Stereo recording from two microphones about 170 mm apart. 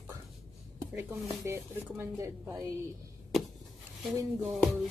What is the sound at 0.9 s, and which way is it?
Speech, 15° right (ahead or behind).